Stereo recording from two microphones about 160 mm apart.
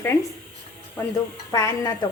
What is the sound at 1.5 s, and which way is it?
Speech, 25° left (ahead or behind).